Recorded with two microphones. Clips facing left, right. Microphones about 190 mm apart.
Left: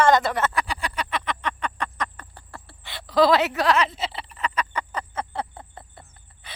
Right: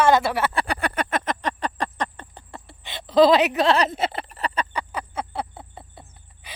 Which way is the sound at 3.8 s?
50° right (ahead or behind).